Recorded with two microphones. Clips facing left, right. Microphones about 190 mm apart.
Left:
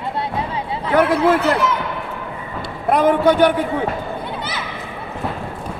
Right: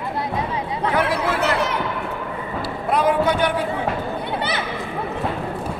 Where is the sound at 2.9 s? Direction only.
55° left (ahead or behind).